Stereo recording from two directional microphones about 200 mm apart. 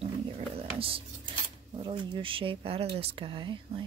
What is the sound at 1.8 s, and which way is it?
Speech, 25° right (ahead or behind).